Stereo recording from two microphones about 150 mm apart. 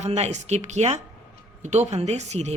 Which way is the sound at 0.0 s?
50° right (ahead or behind).